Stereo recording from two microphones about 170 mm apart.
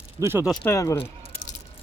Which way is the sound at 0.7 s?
15° left (ahead or behind).